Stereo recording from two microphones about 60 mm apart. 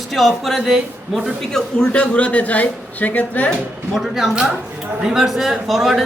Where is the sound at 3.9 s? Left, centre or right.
Centre.